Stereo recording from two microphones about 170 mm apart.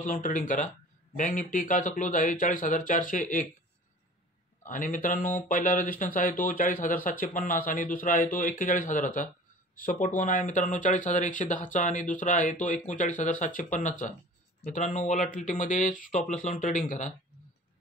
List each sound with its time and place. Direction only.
0.0 s speech: 50° left (ahead or behind)
4.6 s speech: 50° left (ahead or behind)